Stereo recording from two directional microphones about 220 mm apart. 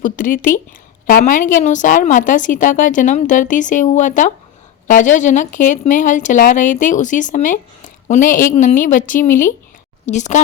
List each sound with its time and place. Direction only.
0.0 s a woman's voice: 40° left (ahead or behind)